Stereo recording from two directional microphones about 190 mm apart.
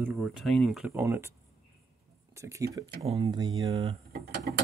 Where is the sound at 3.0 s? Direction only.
30° right (ahead or behind).